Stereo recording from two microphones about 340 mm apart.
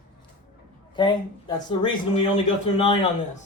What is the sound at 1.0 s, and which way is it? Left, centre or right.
Speech, centre.